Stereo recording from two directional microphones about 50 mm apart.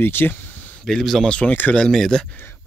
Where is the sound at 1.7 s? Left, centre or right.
Centre.